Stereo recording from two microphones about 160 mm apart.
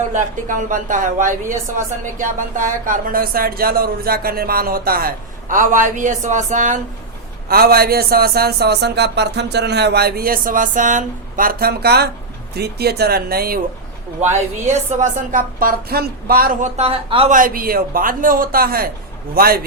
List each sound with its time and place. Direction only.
0.1 s speech: 55° right (ahead or behind)
7.4 s speech: 70° right (ahead or behind)
14.2 s speech: 45° right (ahead or behind); by 16.6 s 65° right (ahead or behind)
16.7 s a woman's voice: 35° right (ahead or behind)
17.3 s speech: 60° right (ahead or behind)